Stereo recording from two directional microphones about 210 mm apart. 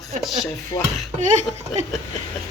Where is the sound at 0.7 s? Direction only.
20° left (ahead or behind).